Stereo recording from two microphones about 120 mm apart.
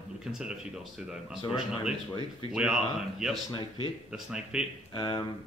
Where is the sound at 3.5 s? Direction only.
40° left (ahead or behind).